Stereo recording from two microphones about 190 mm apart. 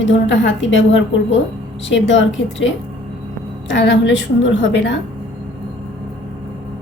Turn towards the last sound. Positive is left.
turn(degrees=70)  # may be behind; listen again after turning